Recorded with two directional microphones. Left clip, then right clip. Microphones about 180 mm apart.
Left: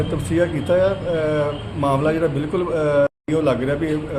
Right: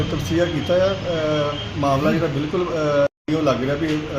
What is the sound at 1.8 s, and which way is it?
A man's voice, 10° left (ahead or behind).